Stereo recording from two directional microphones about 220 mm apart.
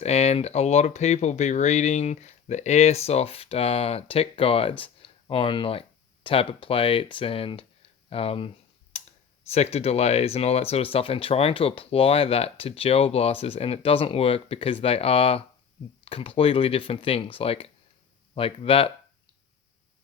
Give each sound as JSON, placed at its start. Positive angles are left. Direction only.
{"t": 0.0, "sound": "speech", "side_deg": 30}